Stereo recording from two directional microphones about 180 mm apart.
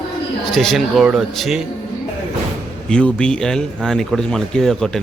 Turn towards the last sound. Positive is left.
turn(degrees=0)  # may be behind; listen again after turning